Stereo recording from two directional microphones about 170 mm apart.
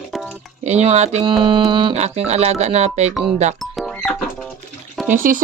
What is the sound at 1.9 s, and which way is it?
Speech, 40° right (ahead or behind).